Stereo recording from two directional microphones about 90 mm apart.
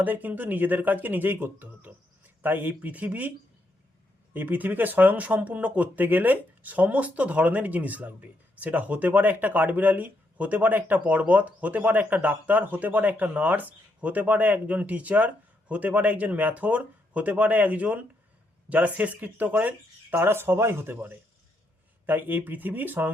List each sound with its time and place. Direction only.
0.0 s speech: 20° right (ahead or behind)
4.4 s speech: 20° right (ahead or behind)